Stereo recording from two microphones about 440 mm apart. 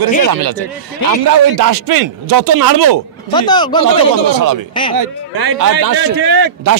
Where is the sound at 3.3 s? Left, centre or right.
Centre.